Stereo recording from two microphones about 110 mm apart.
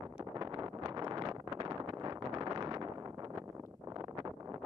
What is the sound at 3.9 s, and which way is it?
Wind noise, 40° right (ahead or behind).